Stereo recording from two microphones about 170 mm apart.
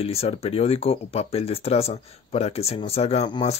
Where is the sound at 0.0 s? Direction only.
35° left (ahead or behind).